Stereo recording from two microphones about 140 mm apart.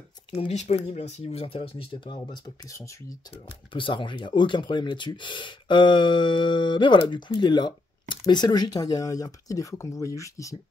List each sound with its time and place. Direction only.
0.5 s speech: 50° left (ahead or behind)
2.3 s speech: 25° left (ahead or behind)
3.7 s speech: 35° left (ahead or behind)